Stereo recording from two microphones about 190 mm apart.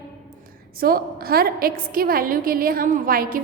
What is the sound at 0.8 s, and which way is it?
A woman's voice, 50° right (ahead or behind).